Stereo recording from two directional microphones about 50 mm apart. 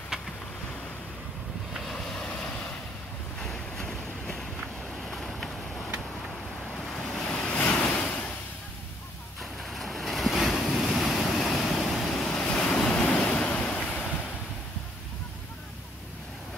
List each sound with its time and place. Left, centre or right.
1.9 s vehicle: centre
3.4 s boat: centre
6.7 s waves: centre
7.2 s vehicle: left
7.8 s a sound: left
9.4 s waves: centre
12.3 s vehicle: centre
13.0 s waves: left